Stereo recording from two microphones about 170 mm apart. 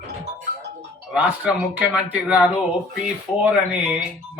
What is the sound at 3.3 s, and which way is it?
Speech, 30° left (ahead or behind).